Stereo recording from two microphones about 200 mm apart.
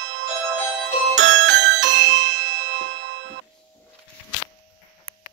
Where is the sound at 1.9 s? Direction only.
65° right (ahead or behind).